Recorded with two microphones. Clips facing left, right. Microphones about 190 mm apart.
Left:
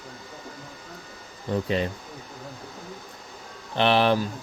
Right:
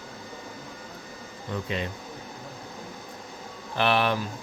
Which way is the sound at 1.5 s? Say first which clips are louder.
Left 6 dB; 35° left (ahead or behind).